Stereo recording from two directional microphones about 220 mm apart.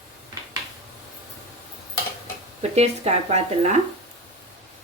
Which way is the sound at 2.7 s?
30° right (ahead or behind).